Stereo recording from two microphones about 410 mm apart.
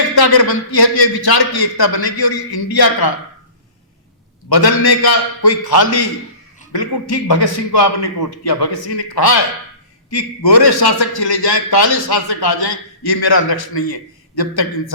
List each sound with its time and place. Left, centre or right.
0.2 s a man's voice: left
4.4 s a man's voice: left